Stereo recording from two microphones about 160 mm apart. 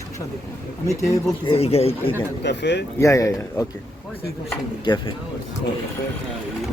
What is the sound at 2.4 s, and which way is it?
Speech, 90° left.